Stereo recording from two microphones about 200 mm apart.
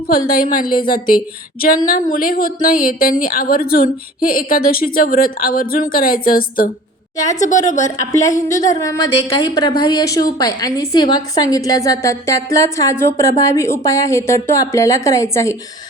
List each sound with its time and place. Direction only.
0.1 s a woman's voice: 45° left (ahead or behind)
7.9 s a woman's voice: 15° left (ahead or behind)